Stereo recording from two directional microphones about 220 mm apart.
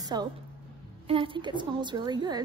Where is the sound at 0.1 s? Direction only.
20° right (ahead or behind).